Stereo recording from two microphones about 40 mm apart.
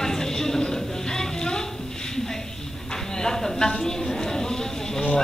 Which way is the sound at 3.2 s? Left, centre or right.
Centre.